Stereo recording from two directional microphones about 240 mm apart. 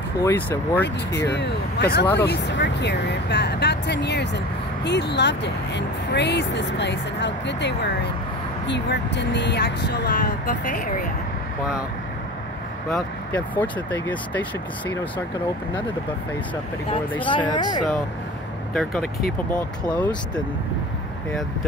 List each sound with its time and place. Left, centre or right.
0.2 s speech: centre
1.1 s speech: left
12.9 s speech: centre
17.5 s speech: centre
20.0 s speech: centre